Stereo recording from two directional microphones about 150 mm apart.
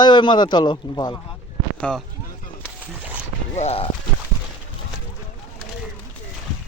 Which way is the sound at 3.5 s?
45° left (ahead or behind).